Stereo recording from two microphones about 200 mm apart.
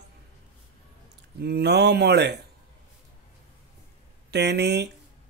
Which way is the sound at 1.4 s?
55° right (ahead or behind).